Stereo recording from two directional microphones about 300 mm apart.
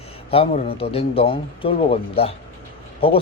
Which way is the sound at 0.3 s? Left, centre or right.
Centre.